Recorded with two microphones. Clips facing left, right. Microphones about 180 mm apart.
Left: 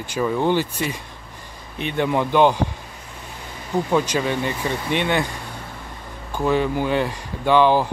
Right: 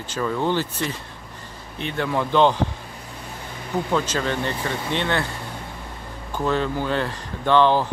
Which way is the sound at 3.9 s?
15° left (ahead or behind).